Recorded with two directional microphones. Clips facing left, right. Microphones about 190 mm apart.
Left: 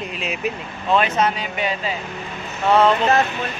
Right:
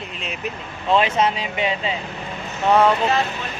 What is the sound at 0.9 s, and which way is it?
Speech, 25° right (ahead or behind).